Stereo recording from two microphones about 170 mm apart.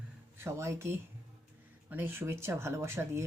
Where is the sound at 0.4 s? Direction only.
15° right (ahead or behind).